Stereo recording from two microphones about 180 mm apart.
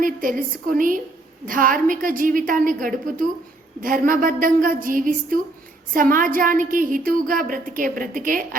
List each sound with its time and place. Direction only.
0.0 s a woman's voice: 50° right (ahead or behind)